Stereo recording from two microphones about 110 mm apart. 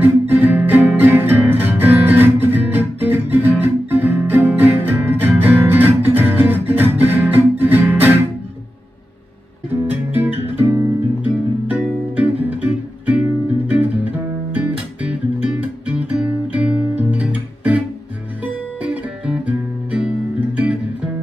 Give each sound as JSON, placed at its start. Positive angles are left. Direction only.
{"t": 0.0, "sound": "music", "side_deg": -15}
{"t": 5.3, "sound": "guitar", "side_deg": -15}
{"t": 9.8, "sound": "music", "side_deg": -15}
{"t": 16.0, "sound": "guitar", "side_deg": -10}
{"t": 18.4, "sound": "music", "side_deg": -10}